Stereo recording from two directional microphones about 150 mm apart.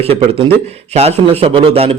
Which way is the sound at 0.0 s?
40° right (ahead or behind).